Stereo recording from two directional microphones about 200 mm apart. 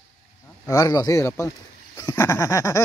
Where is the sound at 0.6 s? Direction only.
15° left (ahead or behind).